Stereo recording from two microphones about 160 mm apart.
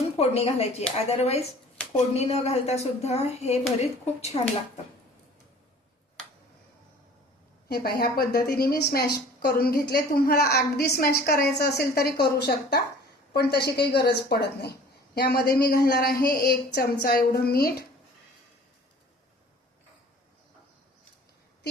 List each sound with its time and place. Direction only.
0.2 s speech: 40° left (ahead or behind)
7.7 s a woman's voice: 75° left (ahead or behind)
12.2 s a woman's voice: 90° left; by 17.8 s 70° left (ahead or behind)